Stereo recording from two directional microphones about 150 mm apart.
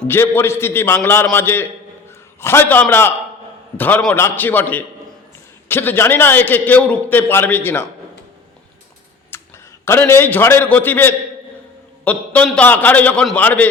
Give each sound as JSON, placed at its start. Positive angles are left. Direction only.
{"t": 0.1, "sound": "a man's voice", "side_deg": 15}
{"t": 9.3, "sound": "a sound", "side_deg": 15}
{"t": 9.8, "sound": "a man's voice", "side_deg": 15}